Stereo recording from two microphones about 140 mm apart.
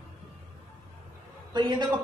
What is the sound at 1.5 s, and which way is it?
Speech, 30° right (ahead or behind).